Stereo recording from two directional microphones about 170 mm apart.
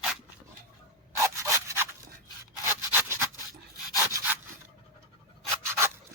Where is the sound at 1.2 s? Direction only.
15° right (ahead or behind).